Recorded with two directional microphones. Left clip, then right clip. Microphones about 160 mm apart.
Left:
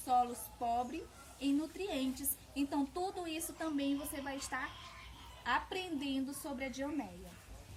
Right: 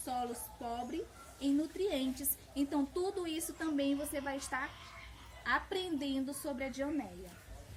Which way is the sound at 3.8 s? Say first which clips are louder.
Right 5 dB; 15° left (ahead or behind).